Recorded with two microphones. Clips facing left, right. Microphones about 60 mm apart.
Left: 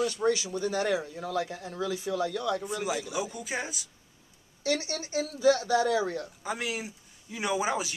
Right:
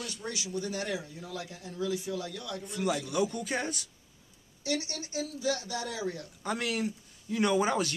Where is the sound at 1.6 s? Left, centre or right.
Left.